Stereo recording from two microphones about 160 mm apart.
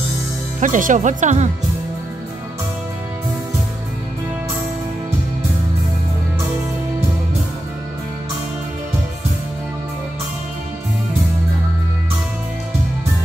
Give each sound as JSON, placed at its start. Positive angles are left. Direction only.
{"t": 0.6, "sound": "speech", "side_deg": -55}